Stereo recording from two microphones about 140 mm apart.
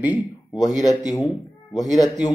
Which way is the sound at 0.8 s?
25° left (ahead or behind).